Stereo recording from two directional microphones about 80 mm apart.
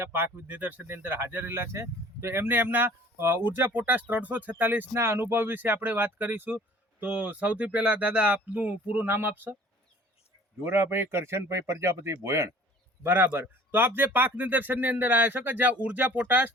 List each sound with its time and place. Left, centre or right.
0.0 s speech: right
10.6 s speech: right
13.0 s speech: right